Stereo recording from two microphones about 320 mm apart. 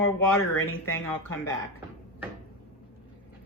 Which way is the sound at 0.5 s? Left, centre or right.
Left.